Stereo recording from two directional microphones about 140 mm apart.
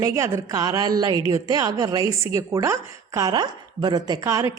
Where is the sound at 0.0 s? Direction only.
20° right (ahead or behind).